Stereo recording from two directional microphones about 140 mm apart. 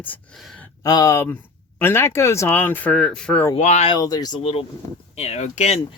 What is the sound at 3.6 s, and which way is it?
Speech, 50° left (ahead or behind).